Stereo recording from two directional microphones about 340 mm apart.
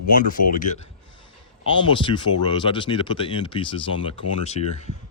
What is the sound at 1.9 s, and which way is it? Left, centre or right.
Speech, centre.